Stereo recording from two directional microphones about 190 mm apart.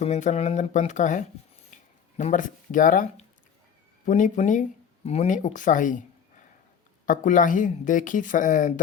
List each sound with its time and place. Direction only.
0.0 s speech: 35° left (ahead or behind)
1.7 s a sound: 40° left (ahead or behind)
2.1 s speech: 40° left (ahead or behind)